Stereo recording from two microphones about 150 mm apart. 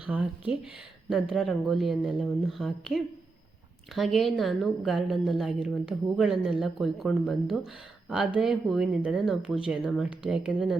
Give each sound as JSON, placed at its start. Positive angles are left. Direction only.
{"t": 0.0, "sound": "a woman's voice", "side_deg": -10}